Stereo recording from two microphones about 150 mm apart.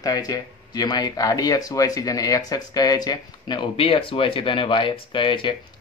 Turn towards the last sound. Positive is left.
turn(degrees=35)  # may be behind; listen again after turning